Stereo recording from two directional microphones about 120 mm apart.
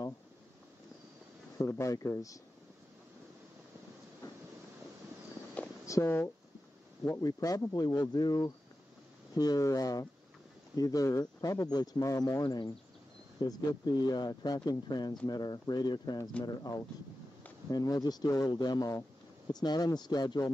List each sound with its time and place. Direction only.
1.6 s speech: 25° left (ahead or behind)
5.9 s speech: 25° left (ahead or behind)
17.6 s speech: 30° left (ahead or behind)